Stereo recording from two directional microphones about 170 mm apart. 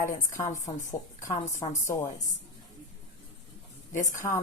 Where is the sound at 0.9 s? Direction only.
15° left (ahead or behind).